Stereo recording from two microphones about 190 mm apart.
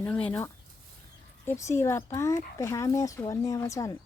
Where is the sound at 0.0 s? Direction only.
5° left (ahead or behind).